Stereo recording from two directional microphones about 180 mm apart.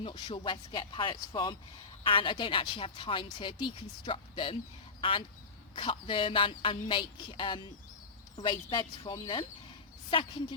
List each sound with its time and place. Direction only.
0.0 s a woman's voice: 25° left (ahead or behind)